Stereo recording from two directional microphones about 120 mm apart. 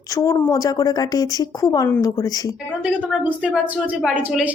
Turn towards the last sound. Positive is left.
turn(degrees=-10)  # may be behind; listen again after turning